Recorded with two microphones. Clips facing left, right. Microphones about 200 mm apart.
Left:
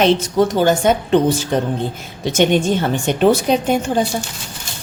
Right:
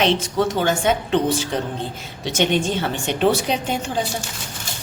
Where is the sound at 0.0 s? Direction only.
40° left (ahead or behind).